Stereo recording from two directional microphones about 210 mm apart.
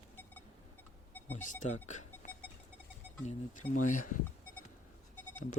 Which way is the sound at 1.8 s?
35° left (ahead or behind).